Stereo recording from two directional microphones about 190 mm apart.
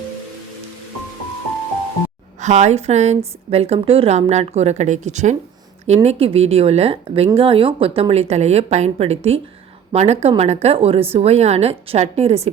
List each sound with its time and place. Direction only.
2.4 s a woman's voice: 35° right (ahead or behind)